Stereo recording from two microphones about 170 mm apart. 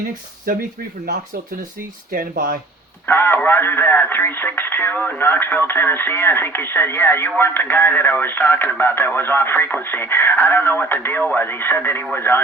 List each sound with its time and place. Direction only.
0.5 s speech: 60° right (ahead or behind)
2.1 s speech: 55° right (ahead or behind)
3.1 s speech: 15° left (ahead or behind)